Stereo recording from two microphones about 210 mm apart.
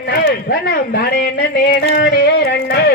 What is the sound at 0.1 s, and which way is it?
A man's voice, 45° left (ahead or behind).